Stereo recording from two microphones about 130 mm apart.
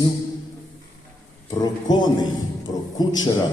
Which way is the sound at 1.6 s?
30° left (ahead or behind).